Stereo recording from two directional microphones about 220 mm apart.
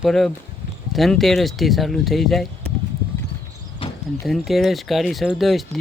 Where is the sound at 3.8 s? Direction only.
25° left (ahead or behind).